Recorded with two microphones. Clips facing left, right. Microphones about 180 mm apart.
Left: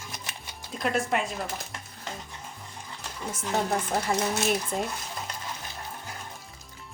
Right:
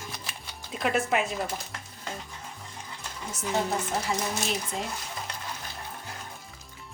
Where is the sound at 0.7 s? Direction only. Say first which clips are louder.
Right 1 dB; 5° right (ahead or behind).